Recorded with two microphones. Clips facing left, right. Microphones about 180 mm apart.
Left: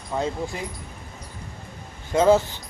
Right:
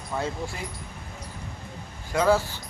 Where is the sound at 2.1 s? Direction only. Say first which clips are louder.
Left 4 dB; 25° left (ahead or behind).